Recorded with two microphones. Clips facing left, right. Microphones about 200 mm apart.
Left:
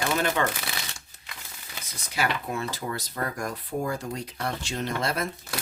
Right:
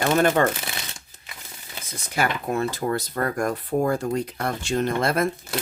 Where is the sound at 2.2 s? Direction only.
50° right (ahead or behind).